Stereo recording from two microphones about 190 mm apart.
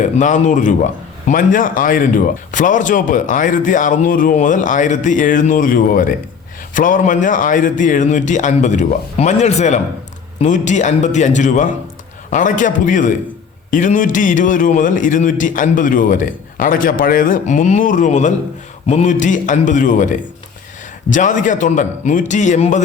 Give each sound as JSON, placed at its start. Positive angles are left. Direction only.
{"t": 0.0, "sound": "a man's voice", "side_deg": 40}